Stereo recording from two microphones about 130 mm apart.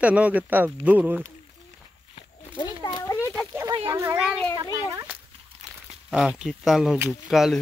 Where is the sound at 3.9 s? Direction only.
25° right (ahead or behind).